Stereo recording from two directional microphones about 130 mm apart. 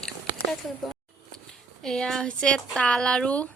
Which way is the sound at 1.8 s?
5° left (ahead or behind).